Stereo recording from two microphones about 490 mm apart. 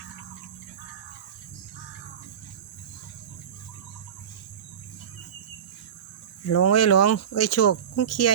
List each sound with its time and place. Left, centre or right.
6.5 s speech: left